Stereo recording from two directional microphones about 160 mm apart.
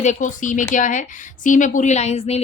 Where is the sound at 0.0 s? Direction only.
50° left (ahead or behind).